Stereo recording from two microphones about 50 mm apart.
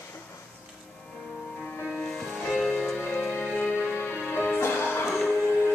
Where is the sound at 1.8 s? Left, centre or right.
Centre.